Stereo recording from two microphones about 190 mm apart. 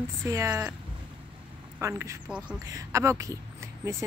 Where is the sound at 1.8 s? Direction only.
15° right (ahead or behind).